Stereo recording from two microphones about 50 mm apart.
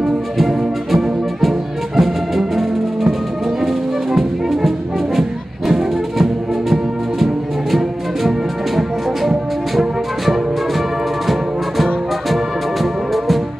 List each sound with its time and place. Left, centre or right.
0.0 s music: centre